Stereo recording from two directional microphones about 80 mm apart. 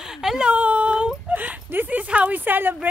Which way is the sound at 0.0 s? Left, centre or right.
Centre.